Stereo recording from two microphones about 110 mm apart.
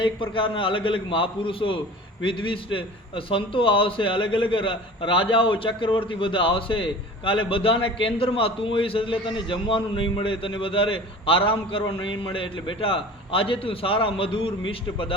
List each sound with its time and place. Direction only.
0.0 s a man's voice: 50° left (ahead or behind)